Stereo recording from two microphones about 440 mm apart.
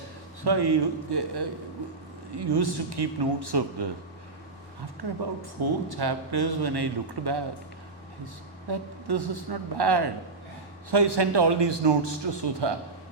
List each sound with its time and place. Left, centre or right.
0.4 s a man's voice: right
5.4 s a man's voice: right